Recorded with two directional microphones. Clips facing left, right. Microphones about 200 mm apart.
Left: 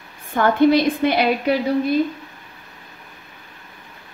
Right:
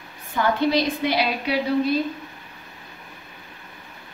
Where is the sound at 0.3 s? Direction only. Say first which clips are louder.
Left 6 dB; 50° left (ahead or behind).